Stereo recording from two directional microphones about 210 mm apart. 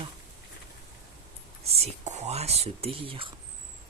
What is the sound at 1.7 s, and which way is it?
Speech, 30° right (ahead or behind).